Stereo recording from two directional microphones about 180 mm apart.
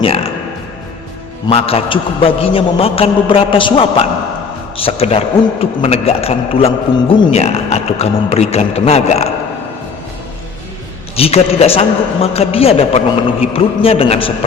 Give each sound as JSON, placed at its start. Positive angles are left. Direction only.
{"t": 0.0, "sound": "music", "side_deg": 30}
{"t": 1.5, "sound": "a man's voice", "side_deg": 35}
{"t": 11.2, "sound": "a man's voice", "side_deg": 35}